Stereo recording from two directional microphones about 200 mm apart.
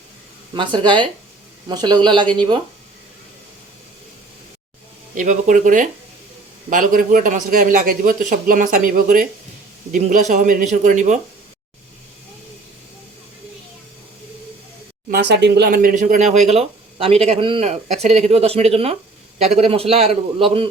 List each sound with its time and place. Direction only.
0.5 s a man's voice: 25° right (ahead or behind)
5.1 s speech: 40° right (ahead or behind)
15.1 s a man's voice: 60° right (ahead or behind); by 20.7 s 30° right (ahead or behind)